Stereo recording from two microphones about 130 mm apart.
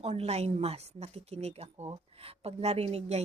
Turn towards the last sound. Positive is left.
turn(degrees=-55)  # may be behind; listen again after turning